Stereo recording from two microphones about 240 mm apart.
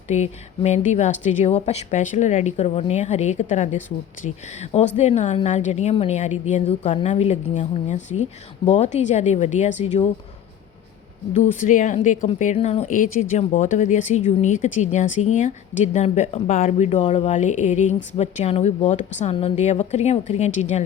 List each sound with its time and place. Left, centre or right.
0.1 s speech: left
11.3 s speech: left